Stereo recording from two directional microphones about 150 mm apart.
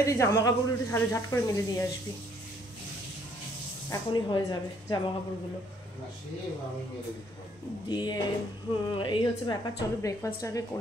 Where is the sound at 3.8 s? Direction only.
25° left (ahead or behind).